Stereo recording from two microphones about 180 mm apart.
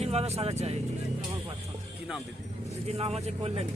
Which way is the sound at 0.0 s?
35° right (ahead or behind).